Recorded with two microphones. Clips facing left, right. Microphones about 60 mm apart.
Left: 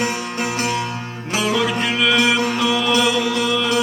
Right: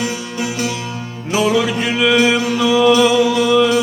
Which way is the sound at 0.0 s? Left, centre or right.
Left.